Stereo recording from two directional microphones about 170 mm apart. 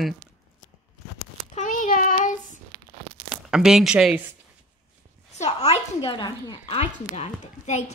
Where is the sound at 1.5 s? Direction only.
50° left (ahead or behind).